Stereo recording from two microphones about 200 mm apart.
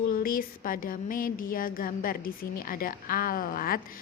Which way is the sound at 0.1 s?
45° left (ahead or behind).